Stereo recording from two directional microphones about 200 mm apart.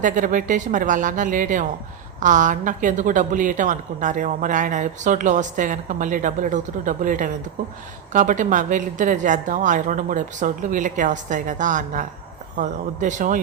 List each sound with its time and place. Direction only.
0.0 s a woman's voice: 40° right (ahead or behind)